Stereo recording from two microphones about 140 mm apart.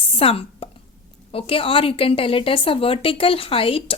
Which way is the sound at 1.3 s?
40° left (ahead or behind).